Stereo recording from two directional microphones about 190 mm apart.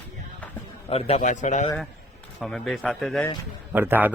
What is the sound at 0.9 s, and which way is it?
Speech, 30° left (ahead or behind).